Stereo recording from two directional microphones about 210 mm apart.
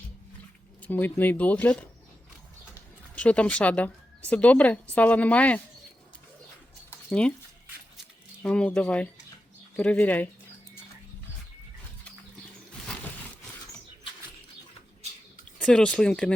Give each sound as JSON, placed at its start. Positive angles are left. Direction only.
{"t": 0.8, "sound": "speech", "side_deg": 10}
{"t": 7.1, "sound": "speech", "side_deg": 5}
{"t": 8.4, "sound": "speech", "side_deg": 5}
{"t": 15.5, "sound": "speech", "side_deg": 5}